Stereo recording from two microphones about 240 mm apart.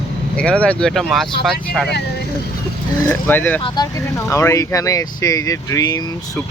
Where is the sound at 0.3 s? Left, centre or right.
Centre.